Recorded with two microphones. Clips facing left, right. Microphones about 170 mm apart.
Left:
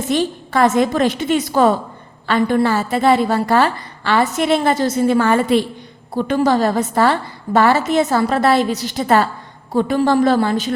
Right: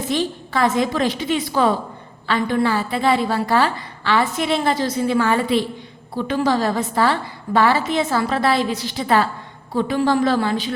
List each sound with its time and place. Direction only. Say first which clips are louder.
0.1 s a woman's voice: left 4 dB; 45° left (ahead or behind)